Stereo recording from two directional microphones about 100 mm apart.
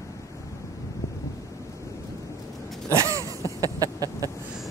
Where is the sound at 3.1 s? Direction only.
35° right (ahead or behind).